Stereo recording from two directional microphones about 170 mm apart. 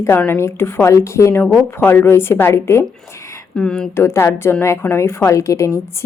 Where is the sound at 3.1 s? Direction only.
15° left (ahead or behind).